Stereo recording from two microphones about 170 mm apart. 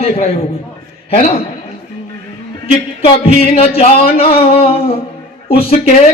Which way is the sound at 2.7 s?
35° left (ahead or behind).